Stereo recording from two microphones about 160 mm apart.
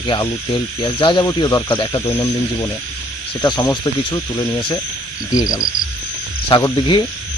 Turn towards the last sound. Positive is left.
turn(degrees=25)  # may be behind; listen again after turning